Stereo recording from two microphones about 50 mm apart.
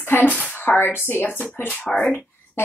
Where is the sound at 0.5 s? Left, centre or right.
Left.